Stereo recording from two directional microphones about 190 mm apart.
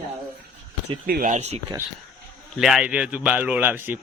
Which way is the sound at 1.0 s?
50° right (ahead or behind).